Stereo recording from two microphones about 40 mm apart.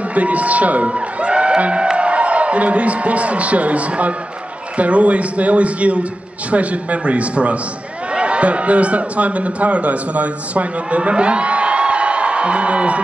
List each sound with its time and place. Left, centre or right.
0.1 s speech: right
0.8 s a man's voice: right